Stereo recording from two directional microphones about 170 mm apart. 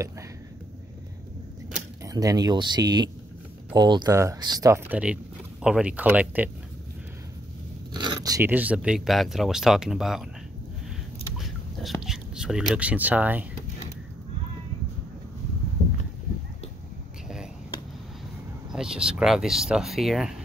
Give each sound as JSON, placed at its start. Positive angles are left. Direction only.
{"t": 2.0, "sound": "speech", "side_deg": -20}
{"t": 7.9, "sound": "a sound", "side_deg": -25}
{"t": 8.5, "sound": "speech", "side_deg": -10}
{"t": 11.3, "sound": "speech", "side_deg": 0}
{"t": 18.7, "sound": "speech", "side_deg": -5}